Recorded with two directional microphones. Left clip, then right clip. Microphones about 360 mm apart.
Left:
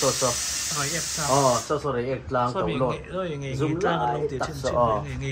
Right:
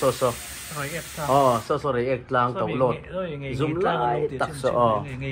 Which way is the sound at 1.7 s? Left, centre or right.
Right.